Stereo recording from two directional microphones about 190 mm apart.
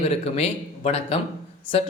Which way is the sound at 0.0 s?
30° left (ahead or behind).